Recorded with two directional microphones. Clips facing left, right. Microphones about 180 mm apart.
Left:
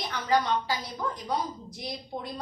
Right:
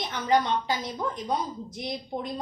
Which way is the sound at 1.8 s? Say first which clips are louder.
Right 4 dB; 20° right (ahead or behind).